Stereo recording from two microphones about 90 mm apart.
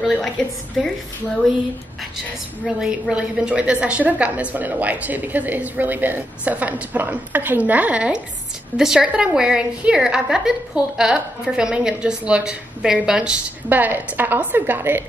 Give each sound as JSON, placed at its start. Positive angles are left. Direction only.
{"t": 0.0, "sound": "a woman's voice", "side_deg": 0}
{"t": 2.8, "sound": "a woman's voice", "side_deg": -10}
{"t": 13.7, "sound": "a woman's voice", "side_deg": -20}